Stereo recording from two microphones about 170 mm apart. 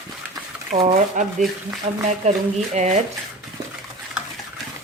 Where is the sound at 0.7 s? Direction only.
40° right (ahead or behind).